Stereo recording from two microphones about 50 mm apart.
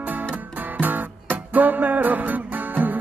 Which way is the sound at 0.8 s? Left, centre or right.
Right.